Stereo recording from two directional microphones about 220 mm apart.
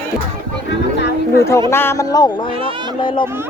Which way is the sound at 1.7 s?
10° left (ahead or behind).